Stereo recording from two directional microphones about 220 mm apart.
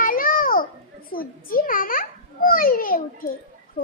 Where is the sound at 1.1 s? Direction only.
40° left (ahead or behind).